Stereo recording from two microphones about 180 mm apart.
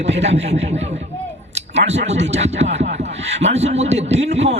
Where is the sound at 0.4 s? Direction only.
40° right (ahead or behind).